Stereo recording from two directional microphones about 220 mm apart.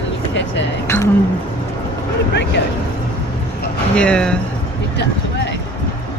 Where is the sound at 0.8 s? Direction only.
10° left (ahead or behind).